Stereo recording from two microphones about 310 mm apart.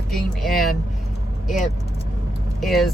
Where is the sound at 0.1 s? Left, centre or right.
Centre.